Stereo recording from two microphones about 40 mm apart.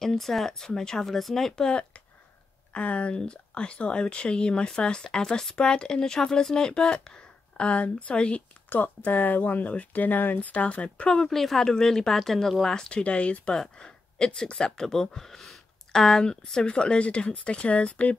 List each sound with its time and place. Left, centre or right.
0.0 s speech: centre
1.7 s speech: left
3.2 s speech: left
8.6 s speech: left
11.1 s speech: centre
11.6 s speech: centre
13.0 s speech: left
13.7 s speech: left